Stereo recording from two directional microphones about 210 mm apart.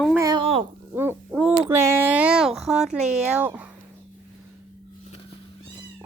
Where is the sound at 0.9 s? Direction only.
10° right (ahead or behind).